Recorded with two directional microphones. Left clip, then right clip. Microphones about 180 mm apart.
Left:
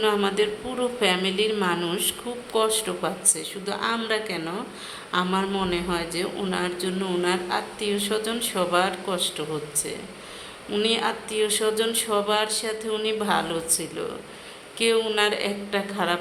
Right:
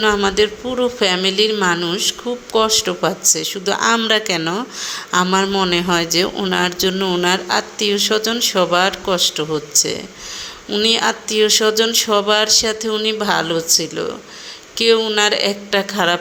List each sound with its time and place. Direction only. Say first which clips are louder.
0.0 s speech: right 7 dB; 25° right (ahead or behind)